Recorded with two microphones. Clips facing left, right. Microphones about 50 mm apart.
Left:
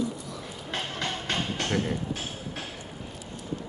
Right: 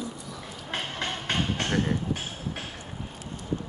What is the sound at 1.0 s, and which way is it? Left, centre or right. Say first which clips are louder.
Music: right 2 dB; right.